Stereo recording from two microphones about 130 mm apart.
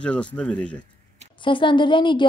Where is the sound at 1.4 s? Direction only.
40° left (ahead or behind).